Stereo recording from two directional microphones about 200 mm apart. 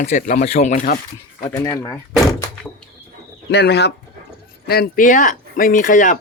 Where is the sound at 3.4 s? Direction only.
55° left (ahead or behind).